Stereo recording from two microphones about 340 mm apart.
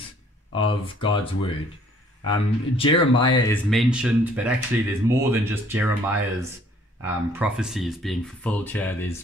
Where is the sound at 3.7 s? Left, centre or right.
Centre.